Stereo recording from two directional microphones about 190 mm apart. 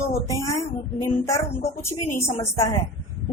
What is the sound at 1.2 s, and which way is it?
Speech, 15° left (ahead or behind).